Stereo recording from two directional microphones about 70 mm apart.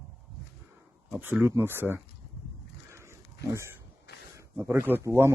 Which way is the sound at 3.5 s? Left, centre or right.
Right.